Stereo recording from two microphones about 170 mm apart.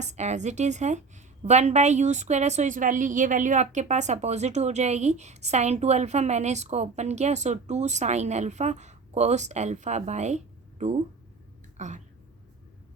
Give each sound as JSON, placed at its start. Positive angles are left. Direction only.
{"t": 0.0, "sound": "a woman's voice", "side_deg": -45}